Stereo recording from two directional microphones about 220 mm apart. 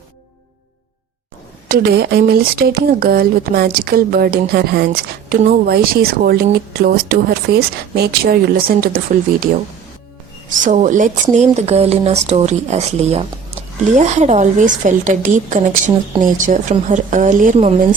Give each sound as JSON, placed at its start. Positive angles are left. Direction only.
{"t": 1.6, "sound": "speech", "side_deg": -45}
{"t": 10.5, "sound": "speech", "side_deg": -35}